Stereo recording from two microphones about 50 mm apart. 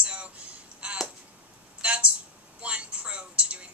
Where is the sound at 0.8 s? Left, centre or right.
Right.